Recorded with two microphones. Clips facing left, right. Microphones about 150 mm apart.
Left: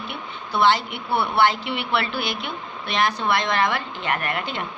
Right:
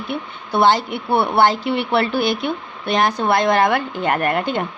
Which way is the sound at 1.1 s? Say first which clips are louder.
Right 5 dB; 55° right (ahead or behind).